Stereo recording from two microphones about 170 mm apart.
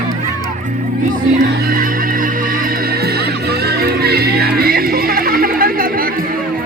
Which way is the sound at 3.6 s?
70° right (ahead or behind).